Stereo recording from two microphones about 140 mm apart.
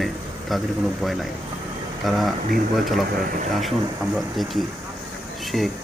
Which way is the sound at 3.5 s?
Centre (ahead or behind).